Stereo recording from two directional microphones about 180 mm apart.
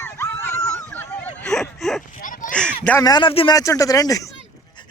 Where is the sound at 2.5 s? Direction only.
5° left (ahead or behind).